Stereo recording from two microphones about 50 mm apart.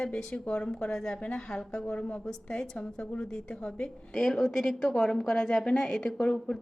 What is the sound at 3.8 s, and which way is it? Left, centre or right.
A woman's voice, centre.